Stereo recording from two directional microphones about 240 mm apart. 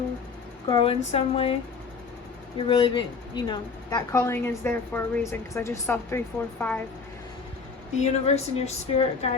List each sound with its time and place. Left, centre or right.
0.7 s a woman's voice: left
2.6 s speech: left; by 6.8 s centre
7.9 s a woman's voice: left